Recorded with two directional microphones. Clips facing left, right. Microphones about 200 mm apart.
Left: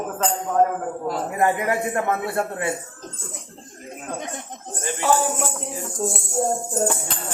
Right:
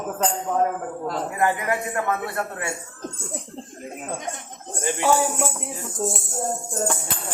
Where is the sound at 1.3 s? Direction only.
25° left (ahead or behind).